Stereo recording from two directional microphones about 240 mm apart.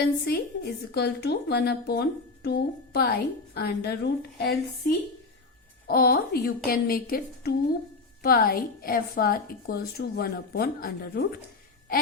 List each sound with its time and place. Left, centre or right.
0.0 s a woman's voice: left
5.9 s a woman's voice: left